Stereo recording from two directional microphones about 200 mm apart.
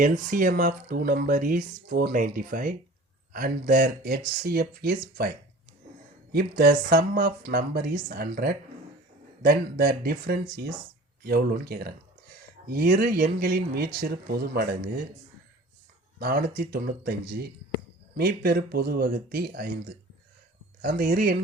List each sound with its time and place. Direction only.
0.0 s speech: 40° right (ahead or behind)
6.3 s speech: 50° right (ahead or behind)
16.1 s speech: 50° right (ahead or behind)
20.8 s speech: 50° right (ahead or behind)